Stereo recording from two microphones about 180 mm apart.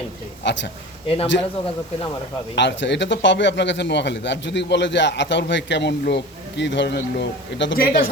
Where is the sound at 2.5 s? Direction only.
75° left (ahead or behind).